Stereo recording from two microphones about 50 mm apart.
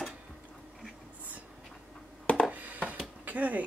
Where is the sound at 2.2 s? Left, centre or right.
Left.